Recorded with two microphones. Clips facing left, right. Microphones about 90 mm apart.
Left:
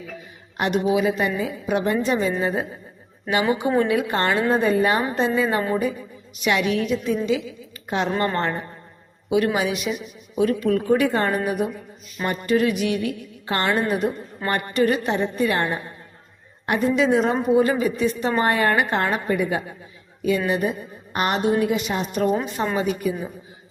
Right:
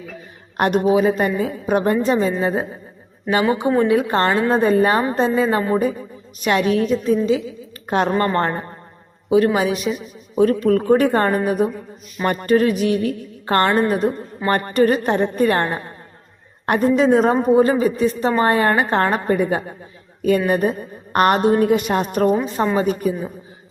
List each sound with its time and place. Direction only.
0.5 s a woman's voice: 45° right (ahead or behind); by 2.6 s 30° right (ahead or behind)
3.8 s a woman's voice: 30° right (ahead or behind)
7.9 s a woman's voice: 50° right (ahead or behind)
12.2 s a woman's voice: 50° right (ahead or behind)
20.2 s a woman's voice: 50° right (ahead or behind)